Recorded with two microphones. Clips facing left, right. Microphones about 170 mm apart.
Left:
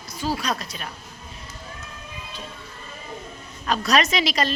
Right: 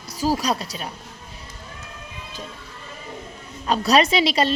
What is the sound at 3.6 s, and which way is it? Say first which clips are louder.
Speech: right 3 dB; 30° right (ahead or behind).